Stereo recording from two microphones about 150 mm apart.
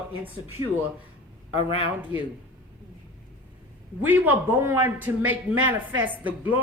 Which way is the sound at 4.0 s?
10° right (ahead or behind).